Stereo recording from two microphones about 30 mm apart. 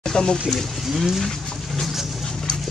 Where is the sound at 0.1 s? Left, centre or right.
Left.